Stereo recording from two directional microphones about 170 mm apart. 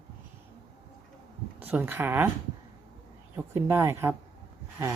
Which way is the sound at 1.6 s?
10° right (ahead or behind).